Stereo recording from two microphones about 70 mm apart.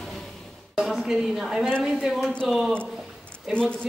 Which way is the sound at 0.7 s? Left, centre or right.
Centre.